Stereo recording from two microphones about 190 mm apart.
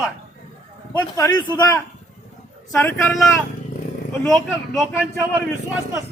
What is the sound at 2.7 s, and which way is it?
Speech, 15° left (ahead or behind).